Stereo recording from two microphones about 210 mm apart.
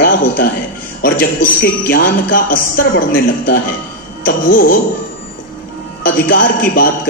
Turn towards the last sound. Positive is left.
turn(degrees=45)  # may be behind; listen again after turning